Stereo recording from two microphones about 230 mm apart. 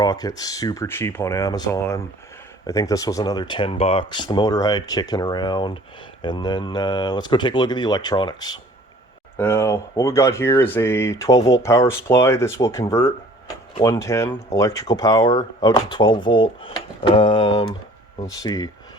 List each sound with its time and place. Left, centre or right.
0.0 s speech: centre